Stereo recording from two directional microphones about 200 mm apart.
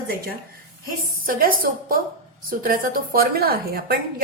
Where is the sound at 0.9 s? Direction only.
45° right (ahead or behind).